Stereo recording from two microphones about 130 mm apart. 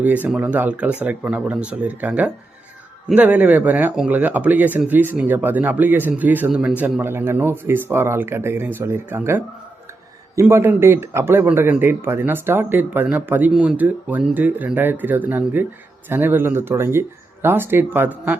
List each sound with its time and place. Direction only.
0.0 s a man's voice: 10° right (ahead or behind)